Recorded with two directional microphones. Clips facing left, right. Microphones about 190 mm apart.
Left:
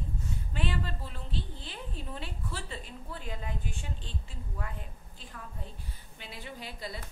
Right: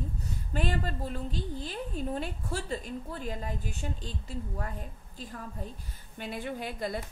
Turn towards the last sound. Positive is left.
turn(degrees=-55)  # may be behind; listen again after turning